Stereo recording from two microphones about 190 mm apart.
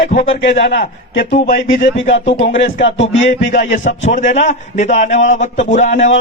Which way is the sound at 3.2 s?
40° left (ahead or behind).